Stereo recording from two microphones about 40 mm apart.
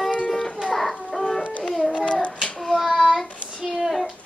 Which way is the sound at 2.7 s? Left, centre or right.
Centre.